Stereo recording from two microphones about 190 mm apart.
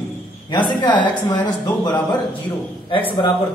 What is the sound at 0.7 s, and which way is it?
A man's voice, 25° left (ahead or behind).